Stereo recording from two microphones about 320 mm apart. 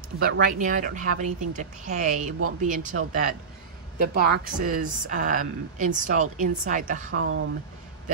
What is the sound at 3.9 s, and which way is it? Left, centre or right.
Speech, right.